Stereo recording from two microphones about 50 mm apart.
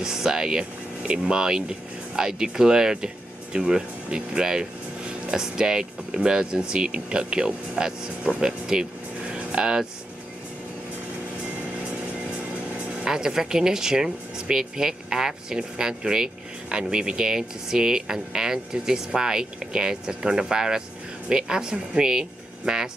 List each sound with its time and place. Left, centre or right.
0.0 s speech: centre
13.0 s speech: centre